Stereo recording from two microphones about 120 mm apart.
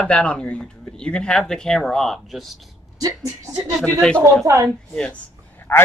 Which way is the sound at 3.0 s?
30° right (ahead or behind).